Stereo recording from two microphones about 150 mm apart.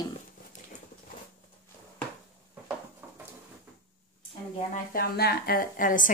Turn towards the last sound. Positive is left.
turn(degrees=65)  # may be behind; listen again after turning